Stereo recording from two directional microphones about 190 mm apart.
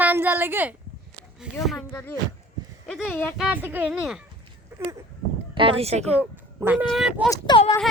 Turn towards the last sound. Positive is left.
turn(degrees=25)  # may be behind; listen again after turning